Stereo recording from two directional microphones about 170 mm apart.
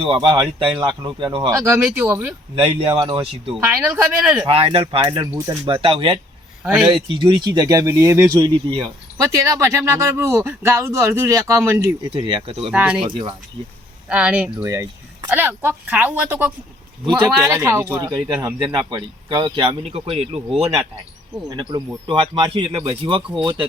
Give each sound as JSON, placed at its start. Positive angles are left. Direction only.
{"t": 0.0, "sound": "speech", "side_deg": -30}
{"t": 2.6, "sound": "speech", "side_deg": -30}
{"t": 3.6, "sound": "speech", "side_deg": -15}
{"t": 4.4, "sound": "speech", "side_deg": -35}
{"t": 5.8, "sound": "speech", "side_deg": -30}
{"t": 6.6, "sound": "a man's voice", "side_deg": -10}
{"t": 6.8, "sound": "speech", "side_deg": -30}
{"t": 12.1, "sound": "speech", "side_deg": -30}
{"t": 12.7, "sound": "speech", "side_deg": -10}
{"t": 13.1, "sound": "speech", "side_deg": -30}
{"t": 14.1, "sound": "speech", "side_deg": -10}
{"t": 21.5, "sound": "speech", "side_deg": -25}